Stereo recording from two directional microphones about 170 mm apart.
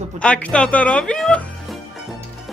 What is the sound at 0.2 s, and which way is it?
Music, 5° left (ahead or behind).